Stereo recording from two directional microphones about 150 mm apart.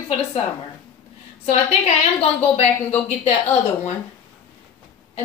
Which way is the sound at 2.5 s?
45° left (ahead or behind).